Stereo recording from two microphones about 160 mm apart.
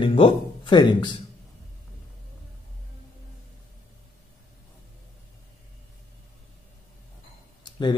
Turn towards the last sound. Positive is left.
turn(degrees=30)  # may be behind; listen again after turning